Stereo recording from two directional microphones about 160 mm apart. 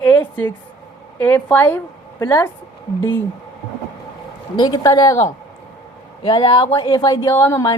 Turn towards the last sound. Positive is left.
turn(degrees=15)  # may be behind; listen again after turning